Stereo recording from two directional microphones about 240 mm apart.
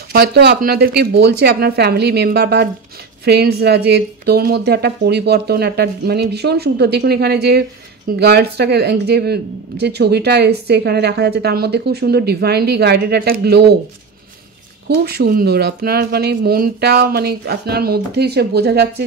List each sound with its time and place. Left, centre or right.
0.1 s speech: right
14.9 s speech: right